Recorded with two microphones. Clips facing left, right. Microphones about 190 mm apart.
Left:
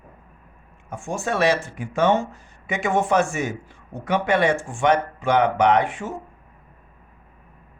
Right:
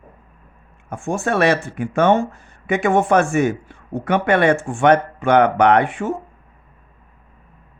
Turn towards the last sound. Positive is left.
turn(degrees=-55)  # may be behind; listen again after turning